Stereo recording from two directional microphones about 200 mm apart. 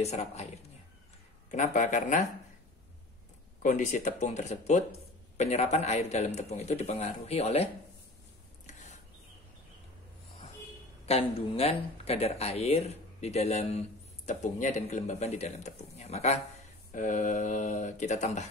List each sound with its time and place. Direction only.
0.0 s speech: 35° left (ahead or behind)
3.6 s speech: 40° left (ahead or behind)
8.6 s a sound: 35° left (ahead or behind)
11.1 s speech: 30° left (ahead or behind)